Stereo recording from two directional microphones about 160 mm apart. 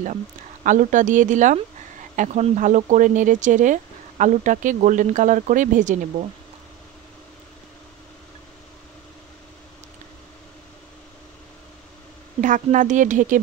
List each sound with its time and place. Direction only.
0.7 s speech: 55° right (ahead or behind)
12.4 s speech: 55° right (ahead or behind)